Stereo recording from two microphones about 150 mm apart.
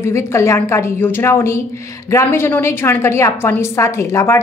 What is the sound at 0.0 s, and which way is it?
A woman's voice, 20° left (ahead or behind).